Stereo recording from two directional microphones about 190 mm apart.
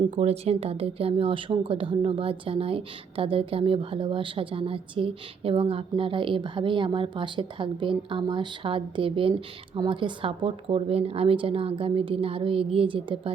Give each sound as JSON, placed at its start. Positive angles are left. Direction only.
{"t": 0.2, "sound": "a woman's voice", "side_deg": -35}